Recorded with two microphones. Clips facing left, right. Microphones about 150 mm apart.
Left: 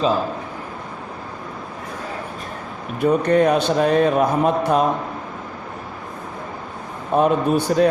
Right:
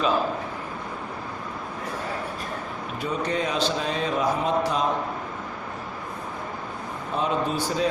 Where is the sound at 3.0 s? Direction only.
55° left (ahead or behind).